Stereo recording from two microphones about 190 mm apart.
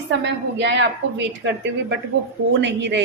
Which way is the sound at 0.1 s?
65° right (ahead or behind).